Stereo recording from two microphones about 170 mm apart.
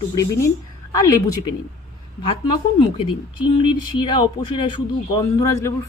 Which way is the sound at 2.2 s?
30° left (ahead or behind).